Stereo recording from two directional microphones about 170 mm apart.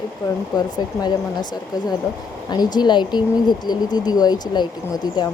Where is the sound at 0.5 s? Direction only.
25° left (ahead or behind).